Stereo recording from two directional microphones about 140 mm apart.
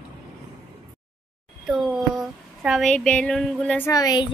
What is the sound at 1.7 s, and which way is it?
Speech, centre (ahead or behind).